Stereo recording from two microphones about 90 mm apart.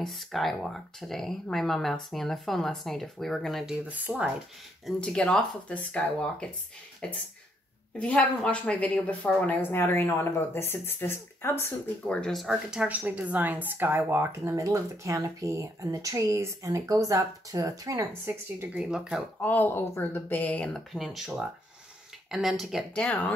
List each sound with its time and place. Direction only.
0.0 s speech: centre (ahead or behind)
3.9 s speech: 15° right (ahead or behind)
5.0 s speech: 10° left (ahead or behind)
8.0 s speech: 15° left (ahead or behind)
12.1 s speech: 5° left (ahead or behind)
12.8 s speech: 15° right (ahead or behind); by 18.0 s 40° right (ahead or behind)
18.2 s speech: 25° right (ahead or behind)
18.8 s speech: 10° right (ahead or behind)
19.4 s speech: 20° left (ahead or behind)
20.9 s speech: centre (ahead or behind)